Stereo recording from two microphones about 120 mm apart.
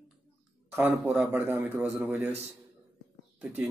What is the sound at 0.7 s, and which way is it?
A man's voice, 15° right (ahead or behind).